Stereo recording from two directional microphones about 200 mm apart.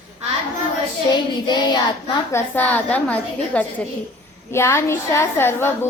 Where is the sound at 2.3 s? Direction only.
10° left (ahead or behind).